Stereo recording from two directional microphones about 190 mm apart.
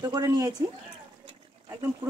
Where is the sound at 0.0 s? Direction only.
20° right (ahead or behind).